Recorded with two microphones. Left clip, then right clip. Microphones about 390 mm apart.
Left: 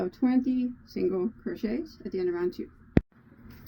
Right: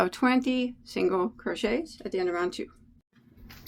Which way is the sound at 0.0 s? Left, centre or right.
Right.